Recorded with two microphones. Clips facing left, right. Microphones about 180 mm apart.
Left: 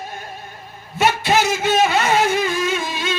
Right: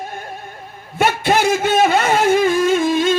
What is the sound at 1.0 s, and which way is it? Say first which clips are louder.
Music: right 1 dB; 50° right (ahead or behind).